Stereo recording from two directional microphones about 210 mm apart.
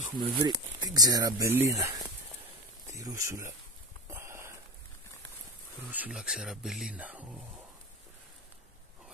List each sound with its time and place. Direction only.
0.0 s speech: 25° right (ahead or behind)
4.1 s a sound: 15° right (ahead or behind)
5.9 s speech: 5° right (ahead or behind)